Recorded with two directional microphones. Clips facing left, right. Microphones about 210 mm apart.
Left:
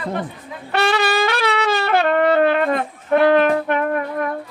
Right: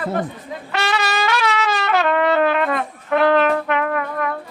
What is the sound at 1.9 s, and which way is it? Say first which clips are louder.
Brass instrument: left 1 dB; 45° left (ahead or behind).